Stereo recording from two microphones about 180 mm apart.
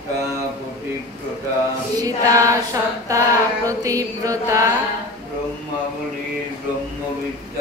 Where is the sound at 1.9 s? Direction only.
20° right (ahead or behind).